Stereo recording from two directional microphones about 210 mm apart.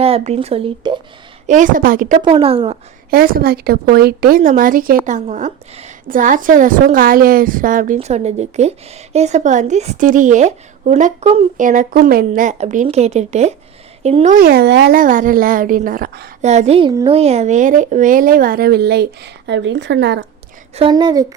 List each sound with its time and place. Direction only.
0.0 s a woman's voice: 25° right (ahead or behind)
2.2 s speech: 25° right (ahead or behind)
3.1 s a woman's voice: 45° right (ahead or behind); by 14.3 s 30° right (ahead or behind)
14.3 s speech: 45° right (ahead or behind)
16.4 s a woman's voice: 30° right (ahead or behind); by 20.2 s 55° right (ahead or behind)
20.7 s speech: 25° right (ahead or behind)